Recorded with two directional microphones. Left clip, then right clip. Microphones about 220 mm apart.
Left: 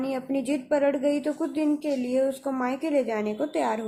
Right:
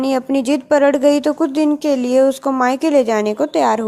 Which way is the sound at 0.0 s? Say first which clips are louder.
Right 11 dB; 35° right (ahead or behind).